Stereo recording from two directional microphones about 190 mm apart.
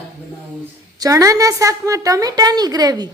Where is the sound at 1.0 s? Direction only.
15° right (ahead or behind).